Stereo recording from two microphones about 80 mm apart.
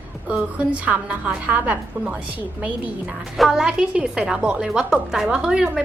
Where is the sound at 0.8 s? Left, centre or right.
Centre.